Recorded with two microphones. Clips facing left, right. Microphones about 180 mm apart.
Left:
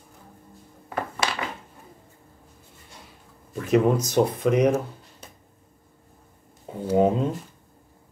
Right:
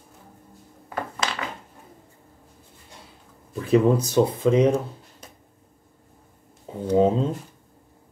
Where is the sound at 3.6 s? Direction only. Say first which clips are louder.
Right 2 dB; 30° right (ahead or behind).